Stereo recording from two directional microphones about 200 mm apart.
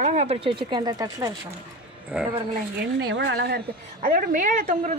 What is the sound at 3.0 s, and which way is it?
A woman's voice, 55° right (ahead or behind).